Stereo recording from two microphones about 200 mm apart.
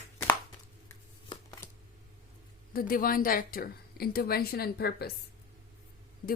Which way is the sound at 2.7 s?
45° left (ahead or behind).